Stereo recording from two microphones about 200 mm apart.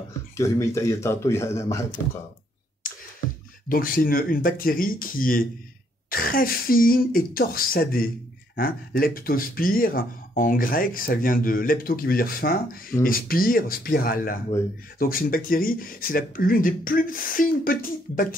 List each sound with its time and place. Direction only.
0.4 s speech: 15° left (ahead or behind)
2.8 s clicking: 45° left (ahead or behind)
3.6 s speech: 45° left (ahead or behind)